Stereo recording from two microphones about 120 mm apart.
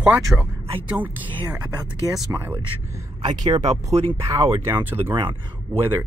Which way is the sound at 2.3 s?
25° right (ahead or behind).